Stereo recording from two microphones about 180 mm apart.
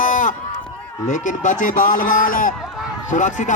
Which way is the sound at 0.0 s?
45° left (ahead or behind).